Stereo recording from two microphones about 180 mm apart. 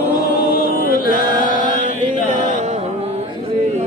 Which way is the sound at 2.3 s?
45° right (ahead or behind).